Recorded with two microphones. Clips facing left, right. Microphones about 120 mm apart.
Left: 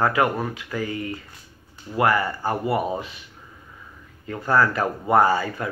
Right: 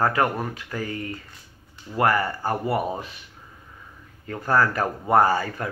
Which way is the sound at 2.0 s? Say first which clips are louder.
Left 1 dB; 35° right (ahead or behind).